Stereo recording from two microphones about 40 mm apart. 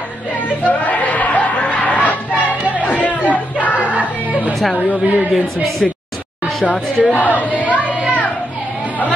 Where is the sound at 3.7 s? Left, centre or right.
Right.